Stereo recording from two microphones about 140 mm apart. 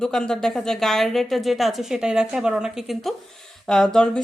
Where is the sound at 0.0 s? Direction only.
5° left (ahead or behind).